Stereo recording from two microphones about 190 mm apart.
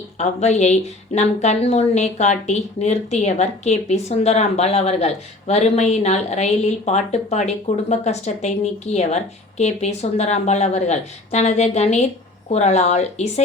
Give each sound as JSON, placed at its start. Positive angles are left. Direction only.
{"t": 0.2, "sound": "a woman's voice", "side_deg": 35}